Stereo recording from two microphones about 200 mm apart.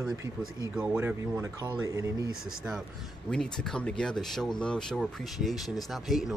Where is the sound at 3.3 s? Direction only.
5° left (ahead or behind).